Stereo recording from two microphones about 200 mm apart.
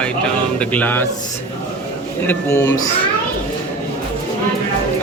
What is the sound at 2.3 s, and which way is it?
Speech, 15° left (ahead or behind).